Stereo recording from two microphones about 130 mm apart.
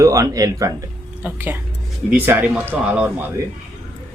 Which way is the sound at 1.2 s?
15° right (ahead or behind).